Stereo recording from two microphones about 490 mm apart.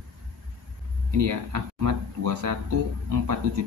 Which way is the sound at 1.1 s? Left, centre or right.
Right.